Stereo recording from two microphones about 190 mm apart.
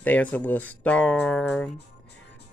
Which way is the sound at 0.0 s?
10° left (ahead or behind).